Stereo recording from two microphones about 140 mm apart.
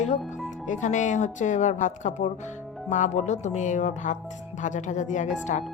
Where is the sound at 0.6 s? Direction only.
60° left (ahead or behind).